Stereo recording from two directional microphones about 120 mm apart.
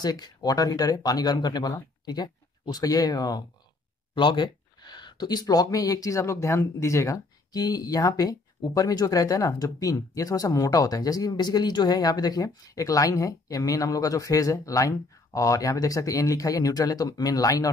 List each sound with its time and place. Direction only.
0.0 s speech: 35° left (ahead or behind)